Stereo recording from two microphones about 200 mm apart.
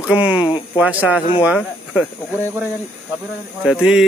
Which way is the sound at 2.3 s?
10° right (ahead or behind).